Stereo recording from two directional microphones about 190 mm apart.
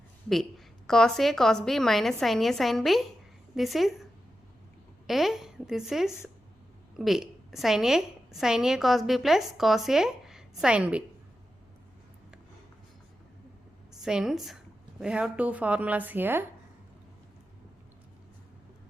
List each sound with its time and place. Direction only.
0.9 s a woman's voice: 5° left (ahead or behind)
14.0 s a woman's voice: 5° right (ahead or behind)